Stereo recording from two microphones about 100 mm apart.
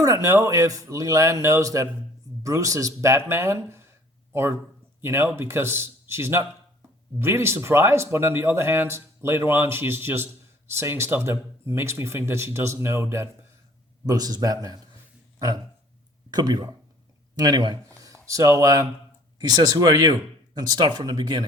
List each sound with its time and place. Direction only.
0.0 s speech: 30° right (ahead or behind)
14.1 s speech: 40° right (ahead or behind)
15.4 s a sound: 40° right (ahead or behind)
16.3 s speech: 40° right (ahead or behind)
17.3 s a sound: 40° right (ahead or behind)
18.3 s speech: 30° right (ahead or behind); by 21.4 s 45° right (ahead or behind)